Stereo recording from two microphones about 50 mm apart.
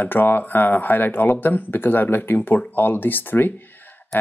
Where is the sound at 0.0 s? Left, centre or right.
Left.